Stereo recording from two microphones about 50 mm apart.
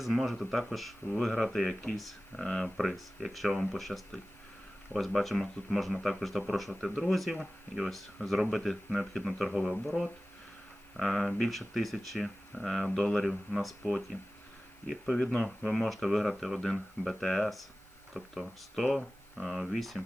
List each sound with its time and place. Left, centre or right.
0.0 s speech: centre
2.4 s speech: centre
2.7 s speech: centre
13.8 s speech: centre